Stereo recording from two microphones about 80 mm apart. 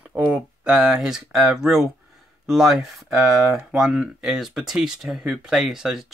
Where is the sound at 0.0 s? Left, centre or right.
Centre.